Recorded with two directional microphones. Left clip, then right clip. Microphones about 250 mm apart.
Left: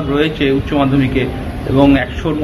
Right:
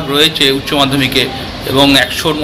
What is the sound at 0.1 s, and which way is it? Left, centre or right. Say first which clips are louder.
Speech: right 5 dB; centre.